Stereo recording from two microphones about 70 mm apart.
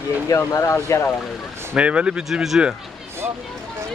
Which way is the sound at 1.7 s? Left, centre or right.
Centre.